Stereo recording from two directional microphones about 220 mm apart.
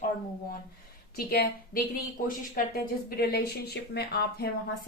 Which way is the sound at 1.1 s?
45° left (ahead or behind).